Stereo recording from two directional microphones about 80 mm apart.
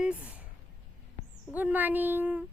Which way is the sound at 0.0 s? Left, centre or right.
Centre.